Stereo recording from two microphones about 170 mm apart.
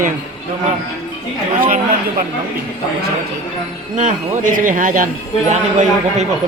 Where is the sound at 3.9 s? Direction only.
50° right (ahead or behind).